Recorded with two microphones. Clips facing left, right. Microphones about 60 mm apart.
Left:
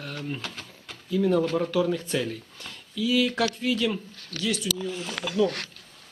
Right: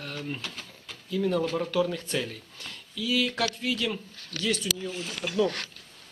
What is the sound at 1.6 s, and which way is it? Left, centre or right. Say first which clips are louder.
Speech: left 2 dB; centre.